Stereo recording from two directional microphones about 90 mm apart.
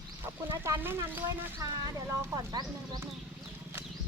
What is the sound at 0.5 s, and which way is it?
Speech, 30° right (ahead or behind).